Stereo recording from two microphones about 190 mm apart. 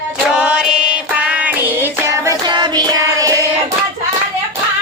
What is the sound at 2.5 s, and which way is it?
Music, 25° right (ahead or behind).